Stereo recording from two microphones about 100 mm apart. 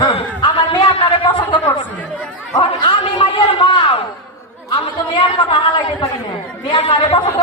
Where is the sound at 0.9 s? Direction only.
65° left (ahead or behind).